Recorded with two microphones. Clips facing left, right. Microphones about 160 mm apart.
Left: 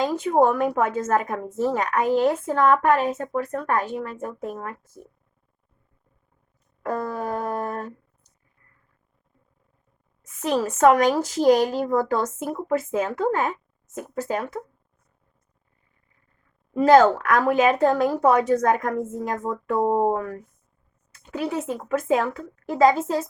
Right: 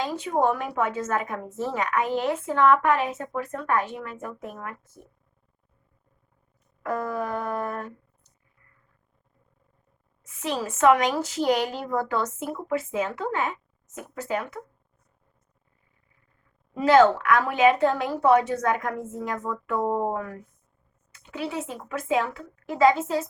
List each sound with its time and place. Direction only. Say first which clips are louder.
0.0 s a woman's voice: left 5 dB; 45° left (ahead or behind)
6.8 s a woman's voice: left 1 dB; 35° left (ahead or behind)
10.2 s a woman's voice: left 6 dB; 45° left (ahead or behind)
16.7 s a woman's voice: left 3 dB; 45° left (ahead or behind)